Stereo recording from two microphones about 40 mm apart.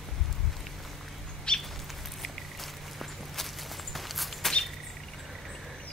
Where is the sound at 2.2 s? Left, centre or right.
Centre.